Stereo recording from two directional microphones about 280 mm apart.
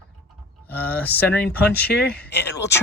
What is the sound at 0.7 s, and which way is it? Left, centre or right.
Speech, centre.